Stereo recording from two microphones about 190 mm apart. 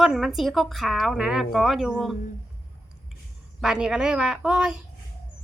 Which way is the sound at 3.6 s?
5° right (ahead or behind).